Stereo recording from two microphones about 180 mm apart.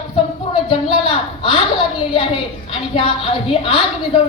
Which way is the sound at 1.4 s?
30° left (ahead or behind).